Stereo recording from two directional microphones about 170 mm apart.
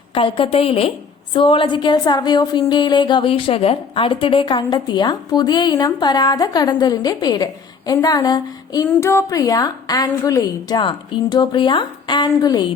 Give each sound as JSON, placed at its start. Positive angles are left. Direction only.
{"t": 0.1, "sound": "a woman's voice", "side_deg": 30}